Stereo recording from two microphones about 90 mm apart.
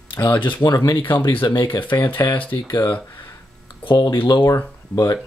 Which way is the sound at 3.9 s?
65° left (ahead or behind).